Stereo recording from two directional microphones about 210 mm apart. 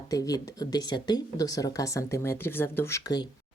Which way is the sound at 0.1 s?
15° left (ahead or behind).